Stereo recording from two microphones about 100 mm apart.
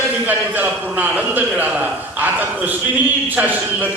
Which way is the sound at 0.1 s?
15° right (ahead or behind).